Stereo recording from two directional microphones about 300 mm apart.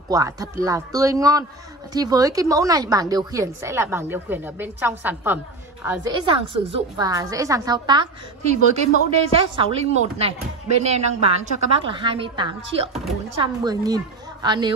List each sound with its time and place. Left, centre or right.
0.1 s a woman's voice: centre